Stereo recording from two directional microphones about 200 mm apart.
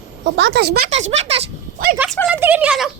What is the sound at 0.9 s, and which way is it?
Speech, 35° right (ahead or behind).